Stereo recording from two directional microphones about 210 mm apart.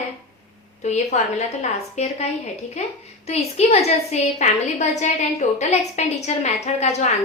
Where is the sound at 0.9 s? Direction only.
35° left (ahead or behind).